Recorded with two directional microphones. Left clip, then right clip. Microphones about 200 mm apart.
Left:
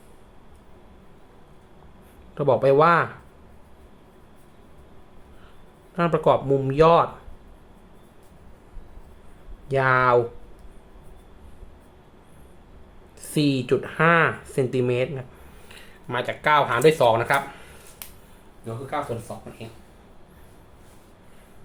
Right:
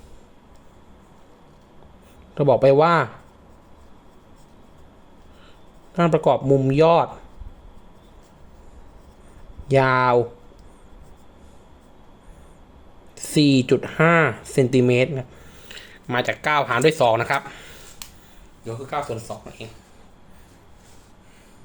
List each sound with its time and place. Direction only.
2.3 s speech: 25° right (ahead or behind)
5.9 s speech: 25° right (ahead or behind)
9.6 s speech: 35° right (ahead or behind)
13.1 s speech: 30° right (ahead or behind)